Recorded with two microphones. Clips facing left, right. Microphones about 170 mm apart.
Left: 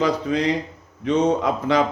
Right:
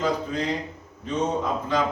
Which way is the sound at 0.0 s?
80° left.